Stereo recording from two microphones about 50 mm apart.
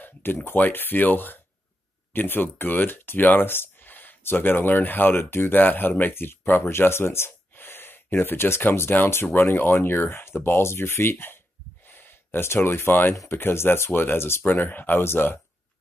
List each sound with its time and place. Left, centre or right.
0.0 s a sound: left
0.5 s speech: left
11.8 s gasp: left
13.3 s speech: left
14.4 s speech: left